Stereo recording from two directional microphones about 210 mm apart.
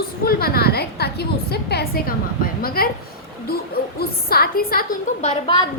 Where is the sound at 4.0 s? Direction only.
45° left (ahead or behind).